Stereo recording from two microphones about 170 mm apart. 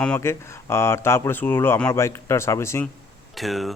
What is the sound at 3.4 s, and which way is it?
Speech, centre (ahead or behind).